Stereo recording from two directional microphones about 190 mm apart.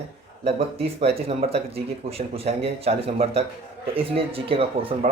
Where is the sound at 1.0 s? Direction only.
30° right (ahead or behind).